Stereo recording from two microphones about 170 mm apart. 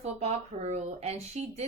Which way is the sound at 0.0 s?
40° right (ahead or behind).